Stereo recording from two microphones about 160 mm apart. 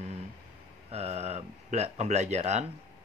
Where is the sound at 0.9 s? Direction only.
40° right (ahead or behind).